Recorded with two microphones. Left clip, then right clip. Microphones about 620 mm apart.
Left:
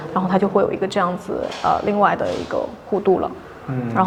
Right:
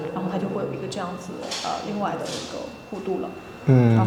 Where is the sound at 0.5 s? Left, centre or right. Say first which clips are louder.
Left 11 dB; left.